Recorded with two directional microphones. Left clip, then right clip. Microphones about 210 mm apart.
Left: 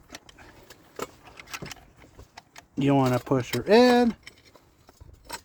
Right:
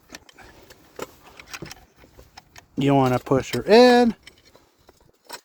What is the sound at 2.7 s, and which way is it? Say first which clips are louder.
Speech: right 4 dB; 45° right (ahead or behind).